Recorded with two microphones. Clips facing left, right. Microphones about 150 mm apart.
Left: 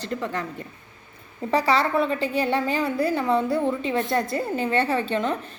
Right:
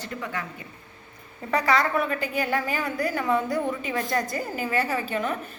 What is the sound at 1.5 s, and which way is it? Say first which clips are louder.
A woman's voice: left 2 dB; 30° left (ahead or behind).